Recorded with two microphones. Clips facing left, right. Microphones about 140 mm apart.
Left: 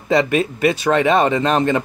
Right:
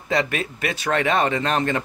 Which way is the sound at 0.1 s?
25° left (ahead or behind).